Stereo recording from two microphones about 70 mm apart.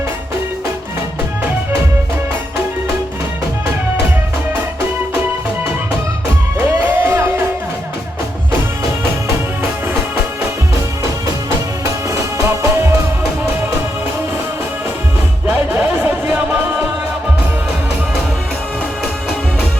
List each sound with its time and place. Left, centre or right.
6.6 s music: right
12.4 s music: right
15.4 s music: right